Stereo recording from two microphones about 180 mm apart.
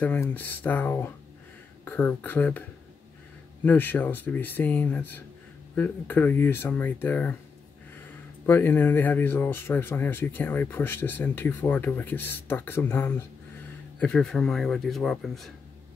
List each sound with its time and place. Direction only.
0.0 s speech: 10° left (ahead or behind)
3.6 s speech: 10° left (ahead or behind)
8.5 s speech: 10° left (ahead or behind)